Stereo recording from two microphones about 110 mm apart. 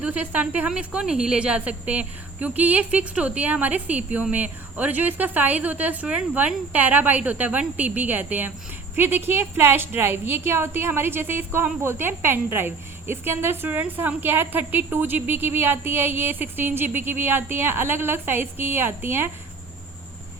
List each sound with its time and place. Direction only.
0.0 s a woman's voice: 15° right (ahead or behind)